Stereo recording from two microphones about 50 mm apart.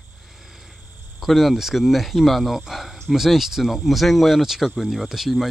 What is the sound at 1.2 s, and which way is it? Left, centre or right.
Speech, centre.